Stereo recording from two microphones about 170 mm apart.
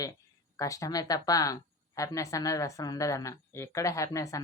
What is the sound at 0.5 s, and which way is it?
A woman's voice, 20° left (ahead or behind).